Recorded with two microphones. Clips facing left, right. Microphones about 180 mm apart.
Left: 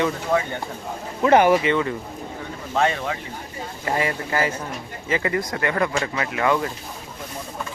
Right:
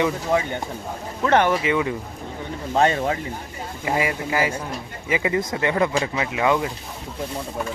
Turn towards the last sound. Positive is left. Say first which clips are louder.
# right 1 dB
turn(degrees=-15)  # may be behind; listen again after turning